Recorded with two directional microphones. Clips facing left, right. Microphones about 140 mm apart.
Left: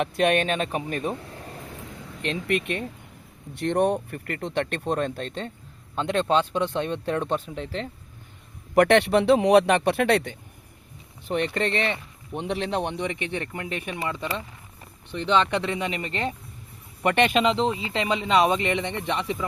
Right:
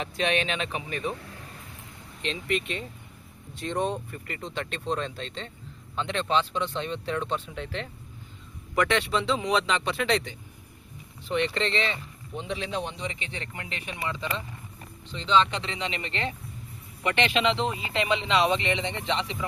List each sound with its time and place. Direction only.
0.0 s speech: 55° left (ahead or behind)
2.2 s a man's voice: 55° left (ahead or behind); by 7.9 s 35° left (ahead or behind)
8.7 s a man's voice: 60° left (ahead or behind)
13.5 s speech: 45° left (ahead or behind)